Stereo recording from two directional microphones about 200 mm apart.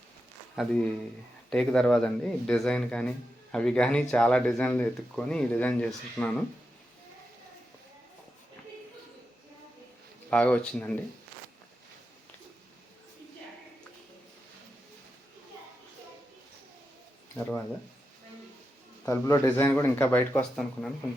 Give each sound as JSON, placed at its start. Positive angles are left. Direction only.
{"t": 0.5, "sound": "speech", "side_deg": 0}
{"t": 10.2, "sound": "speech", "side_deg": 5}
{"t": 17.3, "sound": "speech", "side_deg": 10}
{"t": 19.0, "sound": "speech", "side_deg": 15}